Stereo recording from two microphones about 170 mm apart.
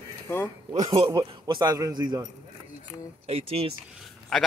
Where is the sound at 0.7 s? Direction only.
45° right (ahead or behind).